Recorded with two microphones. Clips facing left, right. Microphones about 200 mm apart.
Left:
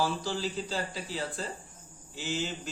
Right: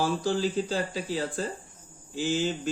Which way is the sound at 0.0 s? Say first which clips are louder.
Right 5 dB; 50° right (ahead or behind).